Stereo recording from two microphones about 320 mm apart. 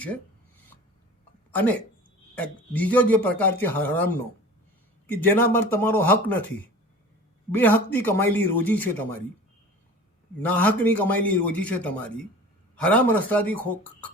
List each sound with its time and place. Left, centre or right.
1.5 s a sound: centre
2.3 s speech: centre
7.5 s speech: centre
10.4 s speech: centre